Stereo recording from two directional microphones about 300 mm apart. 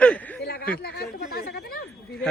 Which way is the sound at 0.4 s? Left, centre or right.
Left.